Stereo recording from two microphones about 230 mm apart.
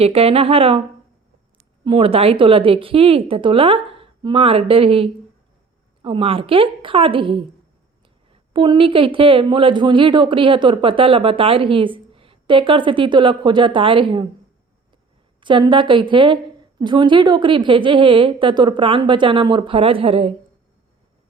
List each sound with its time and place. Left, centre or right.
0.0 s speech: right
1.8 s speech: right
15.4 s speech: right